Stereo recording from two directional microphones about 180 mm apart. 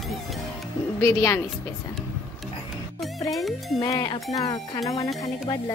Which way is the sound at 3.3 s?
Centre (ahead or behind).